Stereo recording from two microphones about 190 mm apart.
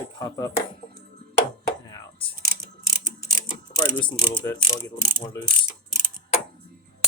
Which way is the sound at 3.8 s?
25° left (ahead or behind).